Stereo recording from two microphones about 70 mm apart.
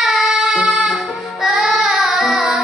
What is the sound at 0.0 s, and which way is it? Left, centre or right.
Child singing, centre.